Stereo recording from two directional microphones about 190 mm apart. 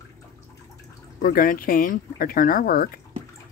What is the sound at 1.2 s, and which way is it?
Speech, 45° left (ahead or behind).